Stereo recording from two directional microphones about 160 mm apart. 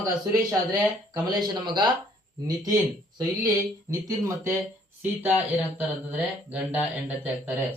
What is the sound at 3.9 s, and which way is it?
Speech, 20° right (ahead or behind).